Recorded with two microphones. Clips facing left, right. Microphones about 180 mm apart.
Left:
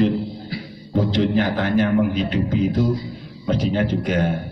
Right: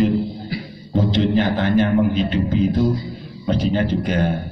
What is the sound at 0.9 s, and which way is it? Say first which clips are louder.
A man's voice: right 1 dB; 25° right (ahead or behind).